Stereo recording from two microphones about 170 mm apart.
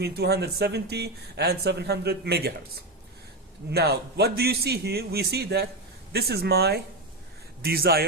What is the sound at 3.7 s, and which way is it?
A man's voice, 70° right (ahead or behind).